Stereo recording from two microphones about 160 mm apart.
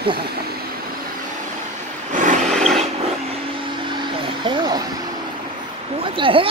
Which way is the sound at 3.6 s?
30° right (ahead or behind).